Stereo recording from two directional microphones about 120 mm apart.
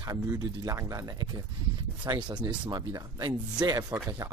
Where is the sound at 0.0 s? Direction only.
30° right (ahead or behind).